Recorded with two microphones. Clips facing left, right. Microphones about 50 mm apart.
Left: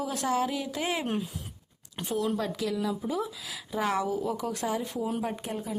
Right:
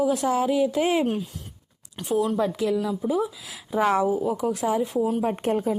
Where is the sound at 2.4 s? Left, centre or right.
Centre.